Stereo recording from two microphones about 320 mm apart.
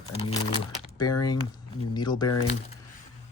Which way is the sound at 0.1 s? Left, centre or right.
Centre.